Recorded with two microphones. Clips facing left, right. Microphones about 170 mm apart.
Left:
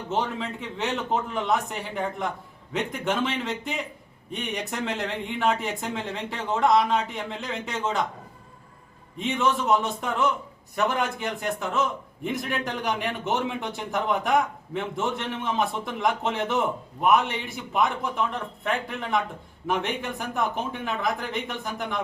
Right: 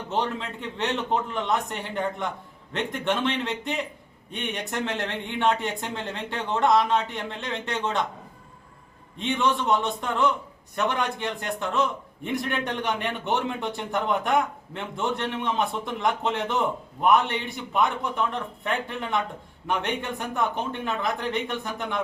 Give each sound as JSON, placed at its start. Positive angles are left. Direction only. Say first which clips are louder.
{"t": 0.1, "sound": "a man's voice", "louder": "even", "side_deg": 0}
{"t": 9.1, "sound": "a man's voice", "louder": "even", "side_deg": 0}